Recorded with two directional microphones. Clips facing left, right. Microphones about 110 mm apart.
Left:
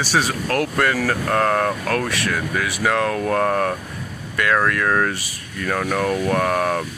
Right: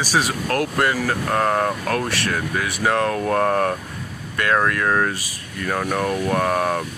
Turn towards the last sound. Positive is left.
turn(degrees=-20)  # may be behind; listen again after turning